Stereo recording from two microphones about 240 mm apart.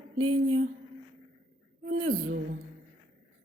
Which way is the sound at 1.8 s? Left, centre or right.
Right.